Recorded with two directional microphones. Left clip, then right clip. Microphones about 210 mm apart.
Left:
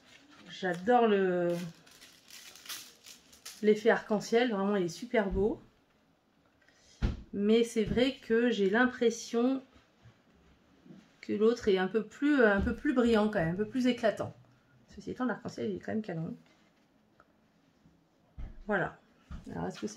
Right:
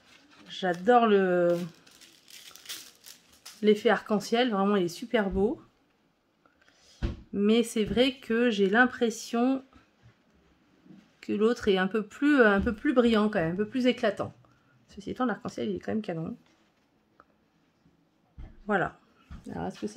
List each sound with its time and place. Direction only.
0.5 s speech: 50° right (ahead or behind)
2.3 s a sound: 25° right (ahead or behind)
3.6 s speech: 50° right (ahead or behind)
6.6 s speech: 50° right (ahead or behind)
11.1 s speech: 50° right (ahead or behind)
18.7 s speech: 55° right (ahead or behind)